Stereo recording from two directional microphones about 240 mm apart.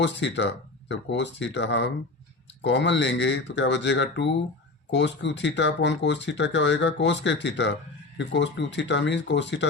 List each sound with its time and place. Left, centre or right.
0.0 s speech: left